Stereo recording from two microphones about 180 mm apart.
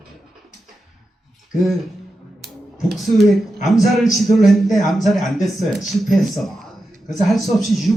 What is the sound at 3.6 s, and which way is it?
A man's voice, centre (ahead or behind).